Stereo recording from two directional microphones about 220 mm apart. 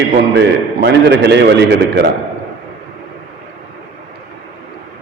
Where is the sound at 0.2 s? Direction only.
50° right (ahead or behind).